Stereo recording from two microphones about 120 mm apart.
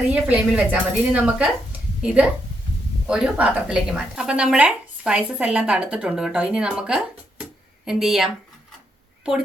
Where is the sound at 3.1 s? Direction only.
10° right (ahead or behind).